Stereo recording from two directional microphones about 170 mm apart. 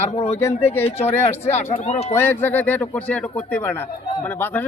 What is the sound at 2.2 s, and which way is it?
Speech, 10° left (ahead or behind).